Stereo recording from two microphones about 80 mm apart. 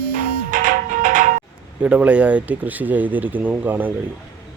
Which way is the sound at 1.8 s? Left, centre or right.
Centre.